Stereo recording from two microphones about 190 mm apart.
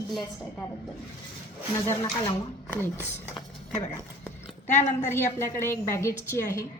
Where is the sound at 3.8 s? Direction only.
10° left (ahead or behind).